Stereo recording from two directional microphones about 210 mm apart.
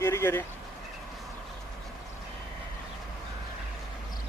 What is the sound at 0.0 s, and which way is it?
Vehicle, 10° left (ahead or behind).